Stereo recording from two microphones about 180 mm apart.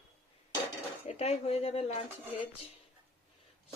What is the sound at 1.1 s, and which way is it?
Cutlery, 35° left (ahead or behind).